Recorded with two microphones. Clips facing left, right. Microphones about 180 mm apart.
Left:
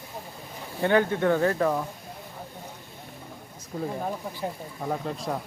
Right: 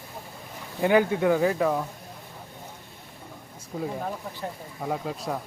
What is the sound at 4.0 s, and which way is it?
Speech, 5° left (ahead or behind).